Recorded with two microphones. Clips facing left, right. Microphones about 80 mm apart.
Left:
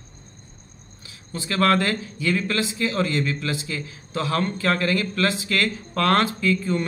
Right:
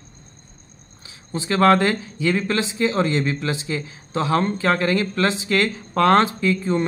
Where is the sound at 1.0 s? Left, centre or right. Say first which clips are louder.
Right 5 dB; right.